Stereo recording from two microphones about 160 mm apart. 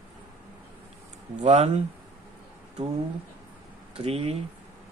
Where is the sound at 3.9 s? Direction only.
40° right (ahead or behind).